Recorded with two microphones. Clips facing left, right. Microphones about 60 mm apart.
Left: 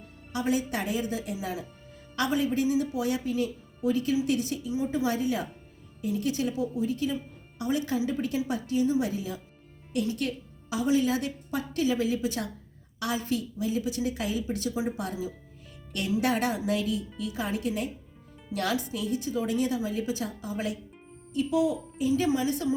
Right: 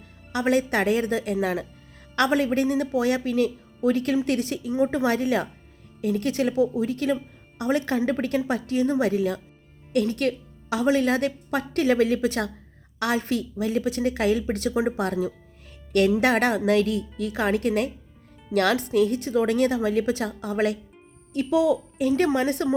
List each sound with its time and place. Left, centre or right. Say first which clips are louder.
0.3 s a woman's voice: right 6 dB; right